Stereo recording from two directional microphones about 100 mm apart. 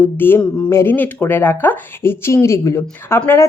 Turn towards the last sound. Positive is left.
turn(degrees=25)  # may be behind; listen again after turning